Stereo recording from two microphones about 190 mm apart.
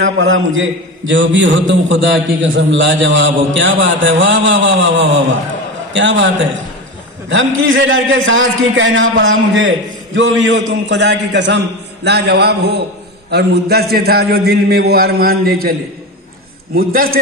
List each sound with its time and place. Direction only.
0.0 s a man's voice: 90° right
7.2 s a man's voice: 85° right; by 15.7 s 50° right (ahead or behind)
16.7 s a man's voice: 50° right (ahead or behind)